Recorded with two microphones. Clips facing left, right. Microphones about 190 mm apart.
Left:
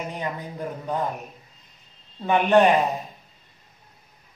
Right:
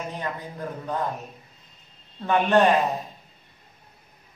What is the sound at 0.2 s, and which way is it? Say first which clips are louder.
Speech: left 2 dB; 15° left (ahead or behind).